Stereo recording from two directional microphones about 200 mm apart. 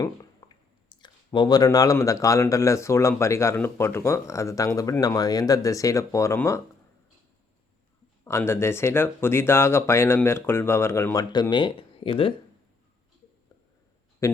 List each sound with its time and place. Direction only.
0.0 s speech: 20° left (ahead or behind)
8.2 s speech: 10° left (ahead or behind)
14.2 s speech: 15° left (ahead or behind)